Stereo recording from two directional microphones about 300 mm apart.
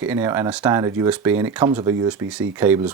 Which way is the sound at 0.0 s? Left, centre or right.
Centre.